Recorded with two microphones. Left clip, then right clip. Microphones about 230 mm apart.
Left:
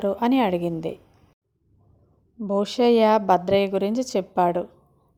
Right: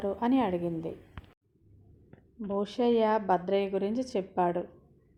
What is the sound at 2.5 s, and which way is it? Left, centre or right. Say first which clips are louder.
A woman's voice: left 8 dB; left.